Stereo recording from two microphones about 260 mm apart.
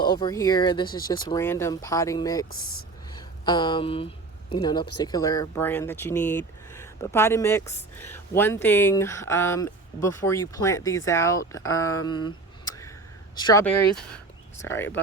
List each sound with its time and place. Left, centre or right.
0.0 s speech: centre
13.4 s speech: centre